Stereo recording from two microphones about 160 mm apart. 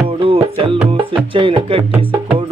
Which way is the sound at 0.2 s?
35° right (ahead or behind).